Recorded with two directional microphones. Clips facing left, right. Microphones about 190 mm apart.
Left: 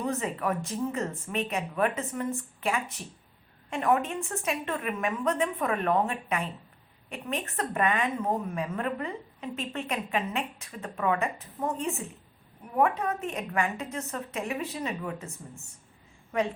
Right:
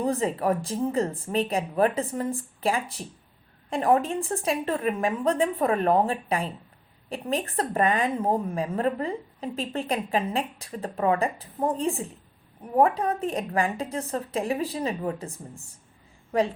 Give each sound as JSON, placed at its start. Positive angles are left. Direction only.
{"t": 0.0, "sound": "speech", "side_deg": -30}